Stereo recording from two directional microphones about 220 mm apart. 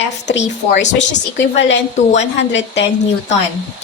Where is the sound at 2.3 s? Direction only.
50° left (ahead or behind).